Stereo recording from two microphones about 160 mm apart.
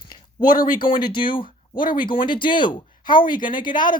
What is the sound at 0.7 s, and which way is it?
Speech, 30° left (ahead or behind).